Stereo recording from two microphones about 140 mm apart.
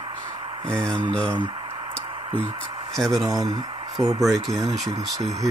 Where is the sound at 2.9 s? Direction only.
Centre (ahead or behind).